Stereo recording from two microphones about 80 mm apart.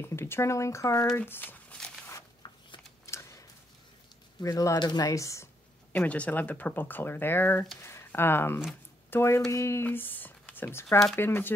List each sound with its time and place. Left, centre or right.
0.0 s speech: left
1.1 s speech: left
2.4 s shuffling cards: left
3.1 s a sound: left
4.4 s speech: left
4.7 s speech: left
5.1 s speech: left
5.9 s speech: centre; by 9.8 s left
9.8 s speech: left